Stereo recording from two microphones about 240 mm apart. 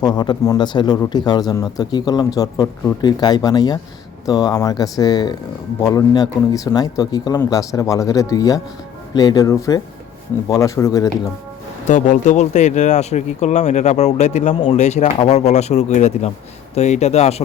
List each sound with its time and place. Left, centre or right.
0.0 s speech: centre
11.9 s speech: left